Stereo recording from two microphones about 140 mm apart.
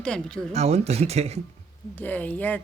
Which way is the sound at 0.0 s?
5° left (ahead or behind).